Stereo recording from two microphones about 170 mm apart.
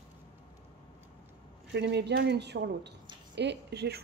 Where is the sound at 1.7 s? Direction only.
85° right.